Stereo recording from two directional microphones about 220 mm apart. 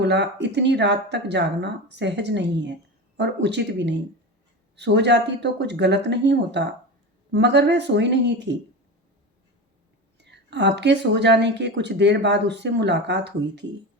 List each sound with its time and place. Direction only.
0.0 s speech: 50° right (ahead or behind)
10.2 s speech: 50° right (ahead or behind)